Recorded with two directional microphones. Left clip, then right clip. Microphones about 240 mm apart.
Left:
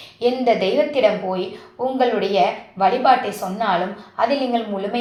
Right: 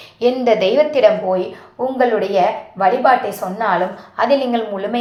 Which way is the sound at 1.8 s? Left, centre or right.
Right.